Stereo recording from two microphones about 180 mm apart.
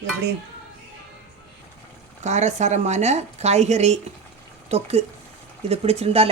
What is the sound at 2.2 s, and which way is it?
Speech, 40° right (ahead or behind).